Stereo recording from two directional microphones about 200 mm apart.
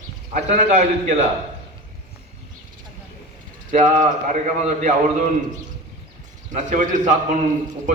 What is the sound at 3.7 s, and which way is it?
Speech, 40° right (ahead or behind).